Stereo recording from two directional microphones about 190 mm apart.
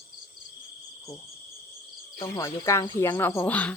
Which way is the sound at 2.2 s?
20° left (ahead or behind).